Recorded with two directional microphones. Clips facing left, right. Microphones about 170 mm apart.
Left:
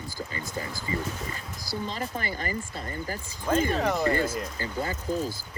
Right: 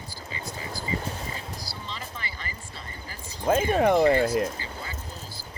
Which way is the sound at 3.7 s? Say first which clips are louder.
Right 6 dB; 55° right (ahead or behind).